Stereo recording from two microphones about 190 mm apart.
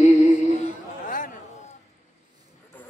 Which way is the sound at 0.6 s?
45° left (ahead or behind).